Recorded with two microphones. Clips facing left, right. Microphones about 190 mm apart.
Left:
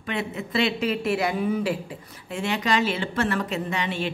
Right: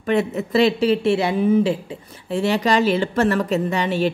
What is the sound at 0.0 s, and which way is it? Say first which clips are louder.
A woman's voice: right 9 dB; 40° right (ahead or behind).